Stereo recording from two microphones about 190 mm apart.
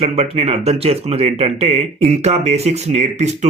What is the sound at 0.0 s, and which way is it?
Speech, 30° right (ahead or behind).